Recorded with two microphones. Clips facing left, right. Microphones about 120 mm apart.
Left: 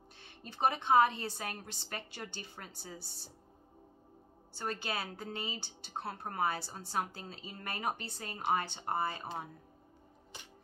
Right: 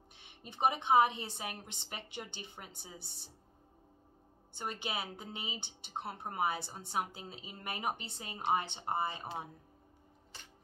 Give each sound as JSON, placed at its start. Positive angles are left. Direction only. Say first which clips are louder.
{"t": 0.2, "sound": "a woman's voice", "louder": "even", "side_deg": -15}
{"t": 4.6, "sound": "a woman's voice", "louder": "left 2 dB", "side_deg": -20}
{"t": 10.3, "sound": "music", "louder": "left 3 dB", "side_deg": 15}